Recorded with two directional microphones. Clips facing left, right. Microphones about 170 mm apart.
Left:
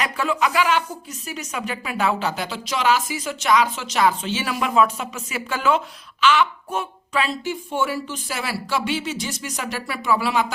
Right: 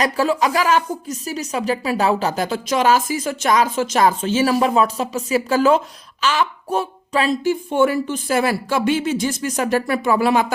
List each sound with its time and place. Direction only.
0.0 s speech: 35° right (ahead or behind)